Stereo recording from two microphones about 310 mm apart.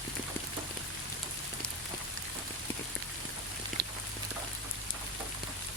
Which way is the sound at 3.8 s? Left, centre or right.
Right.